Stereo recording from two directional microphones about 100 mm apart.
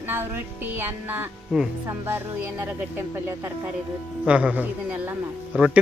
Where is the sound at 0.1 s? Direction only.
20° right (ahead or behind).